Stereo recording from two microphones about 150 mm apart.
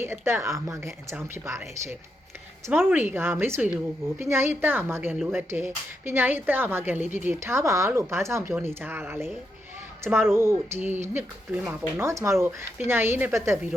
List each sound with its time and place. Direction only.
0.0 s speech: 15° right (ahead or behind)